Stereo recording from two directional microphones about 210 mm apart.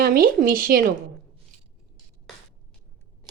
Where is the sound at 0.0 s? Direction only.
45° right (ahead or behind).